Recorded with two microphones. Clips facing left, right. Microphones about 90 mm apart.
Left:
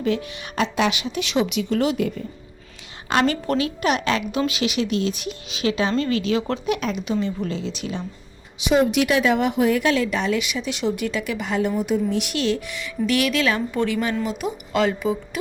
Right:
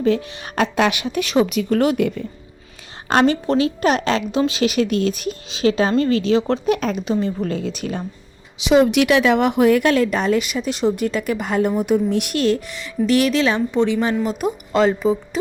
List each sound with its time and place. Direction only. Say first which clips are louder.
0.0 s speech: right 5 dB; 35° right (ahead or behind)
0.5 s speech: right 3 dB; 55° right (ahead or behind)
3.2 s a woman's voice: right 5 dB; 25° right (ahead or behind)
3.8 s speech: right 3 dB; 35° right (ahead or behind)
5.5 s speech: right 5 dB; 35° right (ahead or behind)
7.5 s speech: right 4 dB; 50° right (ahead or behind)
8.5 s speech: right 4 dB; 90° right; by 14.2 s 25° right (ahead or behind)
14.3 s speech: right 4 dB; 40° right (ahead or behind)